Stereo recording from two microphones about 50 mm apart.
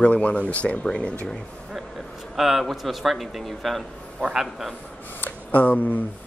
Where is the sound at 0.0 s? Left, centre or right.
Left.